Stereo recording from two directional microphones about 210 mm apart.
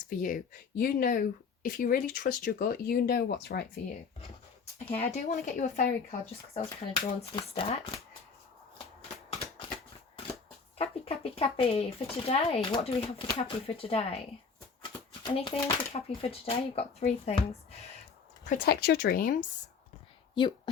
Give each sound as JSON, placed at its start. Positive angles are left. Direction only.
{"t": 0.1, "sound": "speech", "side_deg": 40}
{"t": 4.9, "sound": "speech", "side_deg": 30}
{"t": 7.2, "sound": "speech", "side_deg": 25}
{"t": 9.3, "sound": "a sound", "side_deg": 25}
{"t": 10.8, "sound": "speech", "side_deg": 30}
{"t": 15.2, "sound": "speech", "side_deg": 20}
{"t": 18.4, "sound": "speech", "side_deg": 45}
{"t": 20.4, "sound": "speech", "side_deg": 20}